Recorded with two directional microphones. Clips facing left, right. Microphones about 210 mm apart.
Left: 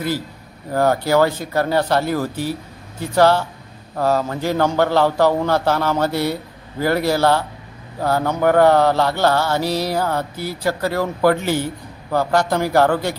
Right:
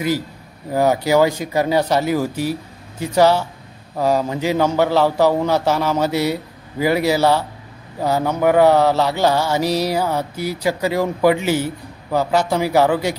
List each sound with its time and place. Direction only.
0.7 s mantra: 10° right (ahead or behind)